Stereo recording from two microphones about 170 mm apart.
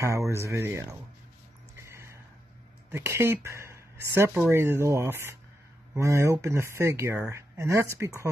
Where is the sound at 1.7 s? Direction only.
15° right (ahead or behind).